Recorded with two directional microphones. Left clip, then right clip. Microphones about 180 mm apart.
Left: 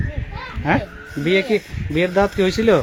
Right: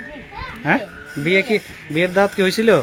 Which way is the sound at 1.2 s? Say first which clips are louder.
Right 1 dB; 15° left (ahead or behind).